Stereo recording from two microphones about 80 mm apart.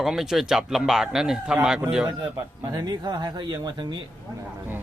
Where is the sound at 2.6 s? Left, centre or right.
Right.